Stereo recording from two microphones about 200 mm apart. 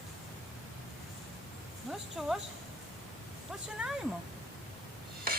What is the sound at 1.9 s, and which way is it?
Speech, centre (ahead or behind).